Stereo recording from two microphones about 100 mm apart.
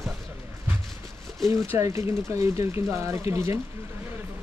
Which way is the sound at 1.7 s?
30° right (ahead or behind).